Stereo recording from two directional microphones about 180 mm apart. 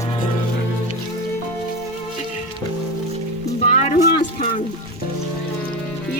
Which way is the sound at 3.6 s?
40° left (ahead or behind).